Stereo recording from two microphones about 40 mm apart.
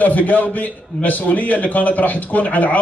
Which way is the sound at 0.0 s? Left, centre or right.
Left.